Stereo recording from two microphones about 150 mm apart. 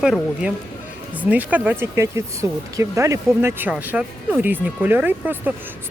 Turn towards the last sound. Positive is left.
turn(degrees=-10)  # may be behind; listen again after turning